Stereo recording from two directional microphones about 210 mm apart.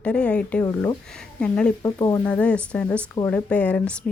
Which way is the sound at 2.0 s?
15° left (ahead or behind).